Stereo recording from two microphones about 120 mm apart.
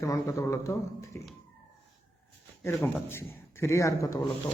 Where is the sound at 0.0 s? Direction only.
30° left (ahead or behind).